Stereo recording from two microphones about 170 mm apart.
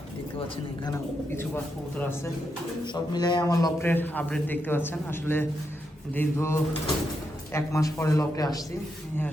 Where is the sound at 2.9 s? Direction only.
25° left (ahead or behind).